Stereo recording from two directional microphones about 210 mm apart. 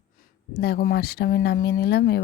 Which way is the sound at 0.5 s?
50° left (ahead or behind).